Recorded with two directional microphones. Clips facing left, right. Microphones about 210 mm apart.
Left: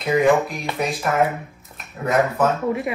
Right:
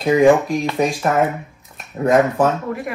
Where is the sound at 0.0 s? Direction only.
45° right (ahead or behind).